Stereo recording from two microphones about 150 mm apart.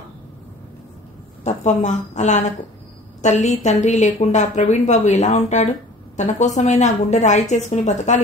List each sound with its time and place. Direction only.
1.4 s a woman's voice: 50° left (ahead or behind)